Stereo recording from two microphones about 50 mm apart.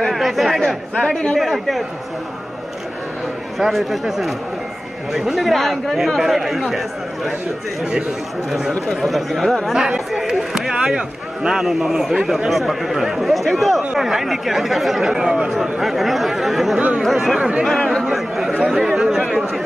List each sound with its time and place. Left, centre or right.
0.0 s chatter: centre
0.9 s a man's voice: centre
1.4 s speech: centre
3.5 s speech: centre
8.5 s a man's voice: centre
9.7 s a man's voice: centre
15.8 s speech: centre
16.7 s speech: right
17.1 s speech: centre
17.4 s speech: right
17.6 s speech: centre
18.0 s chatter: centre
18.7 s a man's voice: centre